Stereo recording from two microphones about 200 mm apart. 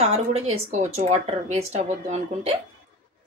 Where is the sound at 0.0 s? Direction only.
35° right (ahead or behind).